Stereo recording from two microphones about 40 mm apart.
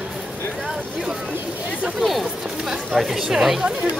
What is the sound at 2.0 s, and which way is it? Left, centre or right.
Speech, centre.